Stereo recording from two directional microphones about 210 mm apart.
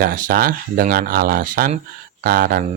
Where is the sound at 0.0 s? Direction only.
40° right (ahead or behind).